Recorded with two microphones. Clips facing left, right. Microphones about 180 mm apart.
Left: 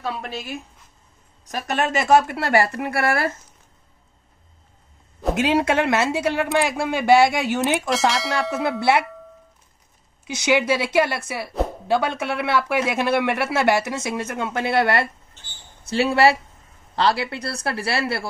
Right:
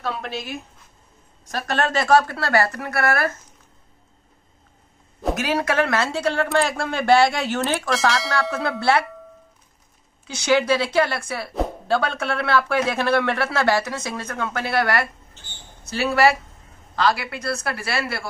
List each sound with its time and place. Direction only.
0.0 s speech: 5° left (ahead or behind)
1.5 s a woman's voice: 15° left (ahead or behind)
5.3 s speech: 25° left (ahead or behind)
10.2 s a woman's voice: 20° left (ahead or behind)